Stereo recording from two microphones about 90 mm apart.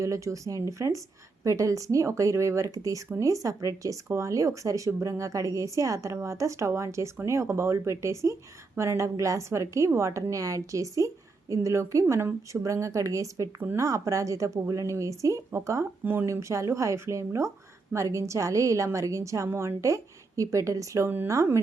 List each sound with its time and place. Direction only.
0.0 s speech: 35° right (ahead or behind)